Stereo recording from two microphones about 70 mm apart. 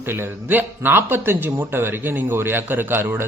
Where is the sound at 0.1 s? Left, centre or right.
Right.